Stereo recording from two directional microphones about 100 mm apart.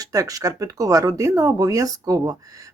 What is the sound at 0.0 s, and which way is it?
Speech, 35° right (ahead or behind).